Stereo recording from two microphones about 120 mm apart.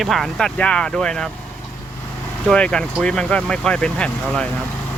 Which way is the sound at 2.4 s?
10° left (ahead or behind).